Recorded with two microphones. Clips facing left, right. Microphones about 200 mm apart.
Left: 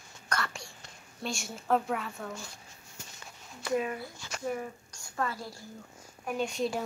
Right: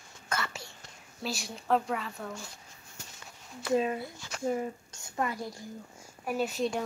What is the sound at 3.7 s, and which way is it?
A woman's voice, 25° right (ahead or behind).